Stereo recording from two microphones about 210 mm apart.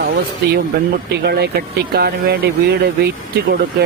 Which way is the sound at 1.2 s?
50° right (ahead or behind).